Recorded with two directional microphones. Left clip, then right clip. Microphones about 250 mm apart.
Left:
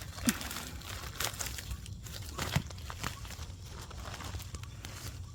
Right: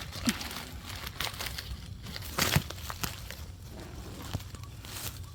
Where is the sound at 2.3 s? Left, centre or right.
Right.